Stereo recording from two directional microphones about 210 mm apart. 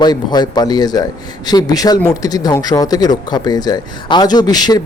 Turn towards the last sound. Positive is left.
turn(degrees=20)  # may be behind; listen again after turning